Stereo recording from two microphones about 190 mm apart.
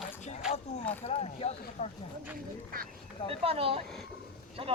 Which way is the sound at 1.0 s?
30° left (ahead or behind).